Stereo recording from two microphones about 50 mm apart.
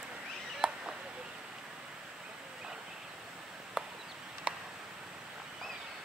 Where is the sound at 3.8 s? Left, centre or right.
Centre.